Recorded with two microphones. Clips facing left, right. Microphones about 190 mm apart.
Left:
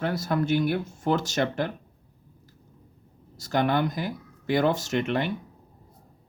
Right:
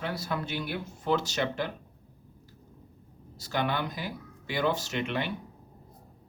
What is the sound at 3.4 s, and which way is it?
Speech, 45° left (ahead or behind).